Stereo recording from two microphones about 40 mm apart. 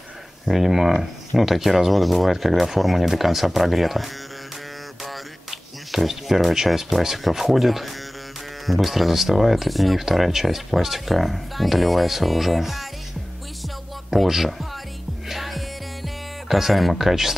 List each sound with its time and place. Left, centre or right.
0.5 s speech: centre
14.1 s speech: centre
15.2 s music: centre